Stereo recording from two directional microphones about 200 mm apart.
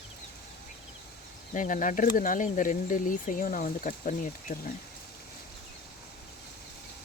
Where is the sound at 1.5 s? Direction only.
40° left (ahead or behind).